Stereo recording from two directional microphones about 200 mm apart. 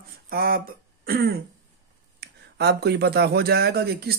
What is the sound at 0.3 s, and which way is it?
Speech, 50° right (ahead or behind).